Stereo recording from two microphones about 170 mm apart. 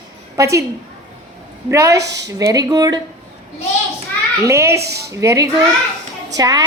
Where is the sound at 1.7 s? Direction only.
15° right (ahead or behind).